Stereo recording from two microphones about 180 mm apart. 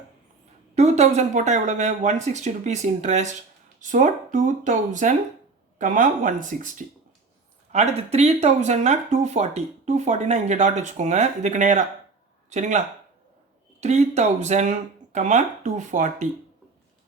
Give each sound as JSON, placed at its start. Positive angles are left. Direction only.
{"t": 0.8, "sound": "speech", "side_deg": -40}
{"t": 13.8, "sound": "speech", "side_deg": -40}